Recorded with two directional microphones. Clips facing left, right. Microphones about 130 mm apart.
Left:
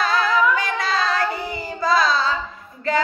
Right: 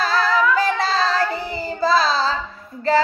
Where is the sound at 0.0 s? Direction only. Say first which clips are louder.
Right 1 dB; 35° right (ahead or behind).